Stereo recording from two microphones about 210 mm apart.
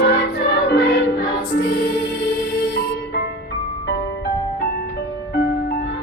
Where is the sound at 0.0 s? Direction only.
50° left (ahead or behind).